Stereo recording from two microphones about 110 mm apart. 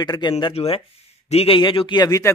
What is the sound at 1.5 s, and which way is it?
Speech, 50° left (ahead or behind).